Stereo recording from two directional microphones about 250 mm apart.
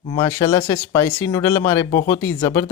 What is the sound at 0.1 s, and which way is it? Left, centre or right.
Speech, centre.